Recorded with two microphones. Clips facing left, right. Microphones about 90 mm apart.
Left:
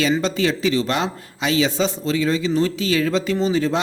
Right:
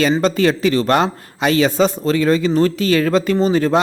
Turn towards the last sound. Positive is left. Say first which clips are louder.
# right 4 dB
turn(degrees=-50)  # may be behind; listen again after turning